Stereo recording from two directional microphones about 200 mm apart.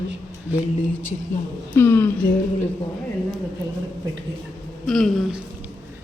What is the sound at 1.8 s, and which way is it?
Speech, 10° left (ahead or behind).